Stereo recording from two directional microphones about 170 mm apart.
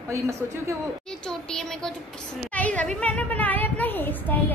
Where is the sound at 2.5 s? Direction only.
10° left (ahead or behind).